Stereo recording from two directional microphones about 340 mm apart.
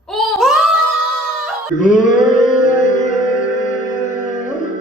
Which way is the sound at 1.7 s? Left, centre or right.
Left.